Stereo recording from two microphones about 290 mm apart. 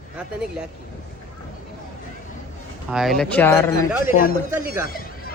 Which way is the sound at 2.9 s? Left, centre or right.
Centre.